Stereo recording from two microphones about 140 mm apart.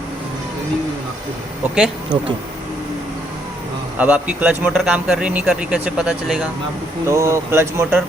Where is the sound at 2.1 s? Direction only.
35° right (ahead or behind).